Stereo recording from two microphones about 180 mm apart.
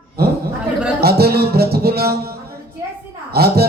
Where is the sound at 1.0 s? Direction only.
60° right (ahead or behind).